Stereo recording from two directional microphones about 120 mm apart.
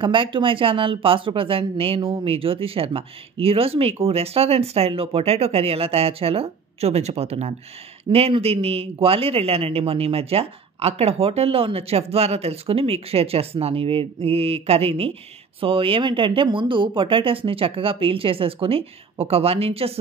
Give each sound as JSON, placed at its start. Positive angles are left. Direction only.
{"t": 0.0, "sound": "speech", "side_deg": -45}